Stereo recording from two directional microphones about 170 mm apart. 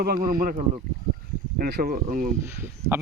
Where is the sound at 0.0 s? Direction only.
60° right (ahead or behind).